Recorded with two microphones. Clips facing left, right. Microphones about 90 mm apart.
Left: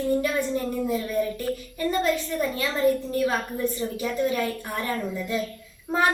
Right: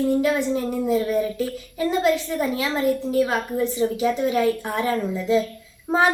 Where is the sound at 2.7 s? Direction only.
90° right.